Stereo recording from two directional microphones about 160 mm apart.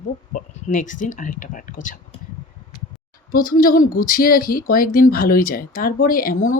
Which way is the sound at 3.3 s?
60° left (ahead or behind).